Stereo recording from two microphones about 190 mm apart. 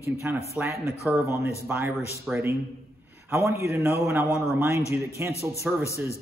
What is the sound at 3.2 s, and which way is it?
A man's voice, 15° right (ahead or behind).